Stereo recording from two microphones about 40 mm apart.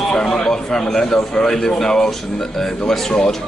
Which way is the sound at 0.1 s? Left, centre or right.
Centre.